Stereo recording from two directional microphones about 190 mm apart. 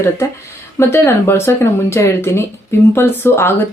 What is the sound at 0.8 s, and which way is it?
Speech, 15° left (ahead or behind).